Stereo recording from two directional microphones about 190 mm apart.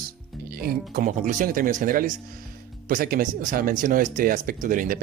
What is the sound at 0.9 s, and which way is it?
Speech, 45° right (ahead or behind).